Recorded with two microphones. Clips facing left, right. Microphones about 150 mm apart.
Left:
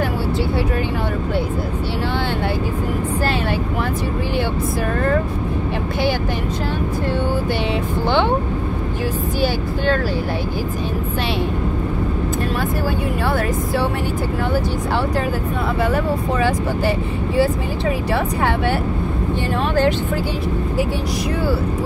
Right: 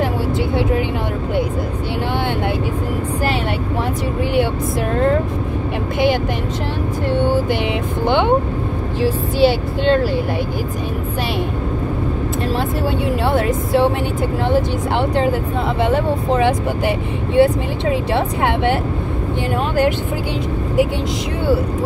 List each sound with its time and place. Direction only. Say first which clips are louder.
9.0 s speech: right 7 dB; 25° right (ahead or behind)
13.3 s speech: right 5 dB; 25° right (ahead or behind)
15.8 s speech: right 3 dB; 25° right (ahead or behind)